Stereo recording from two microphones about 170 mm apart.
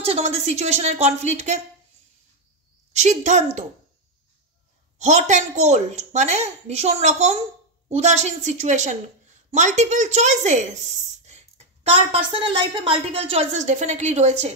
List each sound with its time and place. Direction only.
0.0 s a woman's voice: 40° right (ahead or behind)
2.9 s a woman's voice: 45° right (ahead or behind)
5.0 s a woman's voice: 45° right (ahead or behind)